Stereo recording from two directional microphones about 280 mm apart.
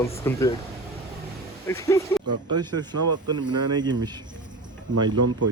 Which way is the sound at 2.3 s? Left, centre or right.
Right.